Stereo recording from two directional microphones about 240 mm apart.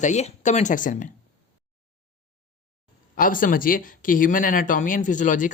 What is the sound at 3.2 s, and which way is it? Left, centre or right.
Speech, left.